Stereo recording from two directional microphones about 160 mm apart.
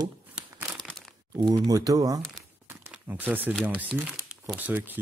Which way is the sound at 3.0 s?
10° right (ahead or behind).